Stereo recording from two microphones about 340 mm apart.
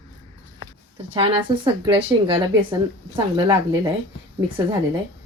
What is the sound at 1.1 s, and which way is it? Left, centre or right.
Speech, centre.